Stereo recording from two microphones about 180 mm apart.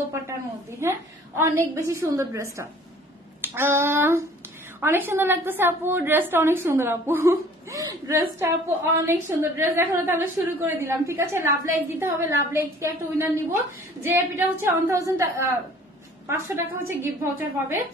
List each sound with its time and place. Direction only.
0.7 s a woman's voice: 15° right (ahead or behind)
3.3 s a sound: 10° right (ahead or behind)
4.7 s a woman's voice: 10° right (ahead or behind)